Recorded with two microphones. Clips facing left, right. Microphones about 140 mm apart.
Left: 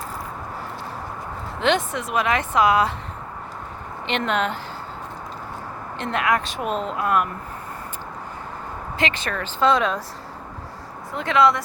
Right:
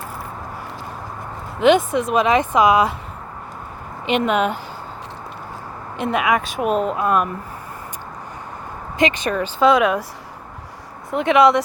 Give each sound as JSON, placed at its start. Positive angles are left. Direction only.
{"t": 1.6, "sound": "speech", "side_deg": -15}
{"t": 4.0, "sound": "speech", "side_deg": -10}
{"t": 6.0, "sound": "speech", "side_deg": -15}
{"t": 6.9, "sound": "speech", "side_deg": -20}
{"t": 9.0, "sound": "speech", "side_deg": -15}
{"t": 11.1, "sound": "speech", "side_deg": -20}